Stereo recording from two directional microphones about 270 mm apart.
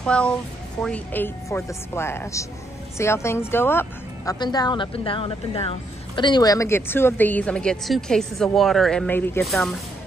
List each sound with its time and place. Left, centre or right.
0.0 s a woman's voice: centre